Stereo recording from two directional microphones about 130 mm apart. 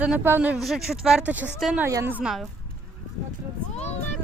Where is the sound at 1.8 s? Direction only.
20° right (ahead or behind).